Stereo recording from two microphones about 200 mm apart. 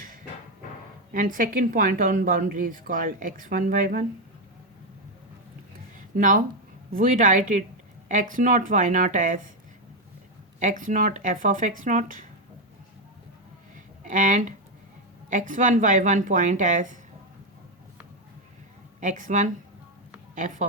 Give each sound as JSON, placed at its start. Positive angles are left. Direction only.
{"t": 1.1, "sound": "a woman's voice", "side_deg": -45}
{"t": 6.1, "sound": "speech", "side_deg": -40}
{"t": 10.6, "sound": "speech", "side_deg": -40}
{"t": 14.0, "sound": "speech", "side_deg": -40}
{"t": 18.9, "sound": "speech", "side_deg": -40}